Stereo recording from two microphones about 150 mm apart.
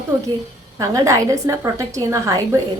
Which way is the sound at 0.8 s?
20° right (ahead or behind).